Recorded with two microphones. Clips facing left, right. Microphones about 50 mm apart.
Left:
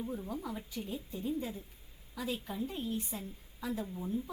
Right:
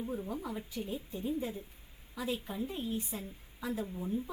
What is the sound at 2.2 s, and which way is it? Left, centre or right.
Speech, right.